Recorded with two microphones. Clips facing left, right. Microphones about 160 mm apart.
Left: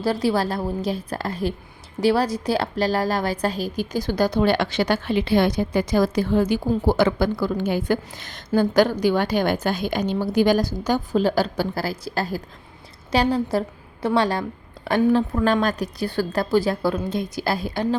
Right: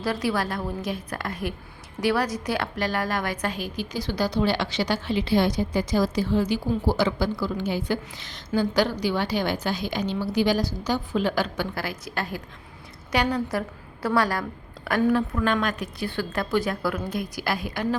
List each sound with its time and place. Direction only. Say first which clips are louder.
0.0 s a woman's voice: left 5 dB; 30° left (ahead or behind)